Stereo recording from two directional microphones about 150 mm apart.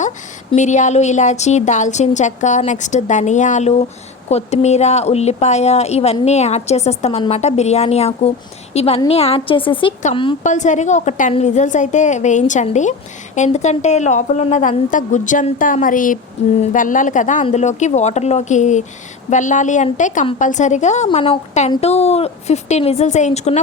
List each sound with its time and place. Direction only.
0.5 s a woman's voice: 55° left (ahead or behind); by 9.9 s 35° left (ahead or behind)
10.4 s a woman's voice: 55° left (ahead or behind)